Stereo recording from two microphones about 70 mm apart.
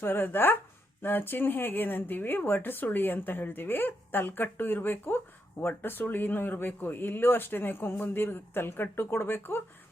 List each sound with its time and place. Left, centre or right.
0.0 s speech: left